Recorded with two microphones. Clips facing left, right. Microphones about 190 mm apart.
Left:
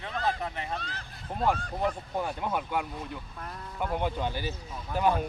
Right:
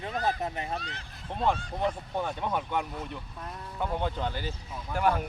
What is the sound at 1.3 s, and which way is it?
Speech, 5° left (ahead or behind).